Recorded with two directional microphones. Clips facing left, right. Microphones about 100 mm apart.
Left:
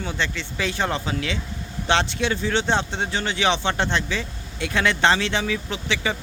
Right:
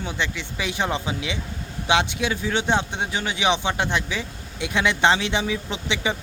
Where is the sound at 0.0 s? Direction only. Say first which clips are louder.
Left 1 dB; 15° right (ahead or behind).